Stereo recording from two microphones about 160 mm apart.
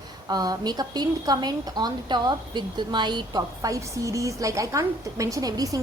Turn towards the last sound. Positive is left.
turn(degrees=-20)  # may be behind; listen again after turning